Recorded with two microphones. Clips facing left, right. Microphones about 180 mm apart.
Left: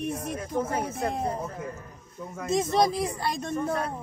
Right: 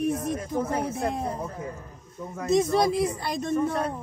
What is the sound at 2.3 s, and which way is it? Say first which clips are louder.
Speech: right 2 dB; centre (ahead or behind).